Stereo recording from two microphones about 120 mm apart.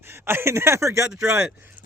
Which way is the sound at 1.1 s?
20° right (ahead or behind).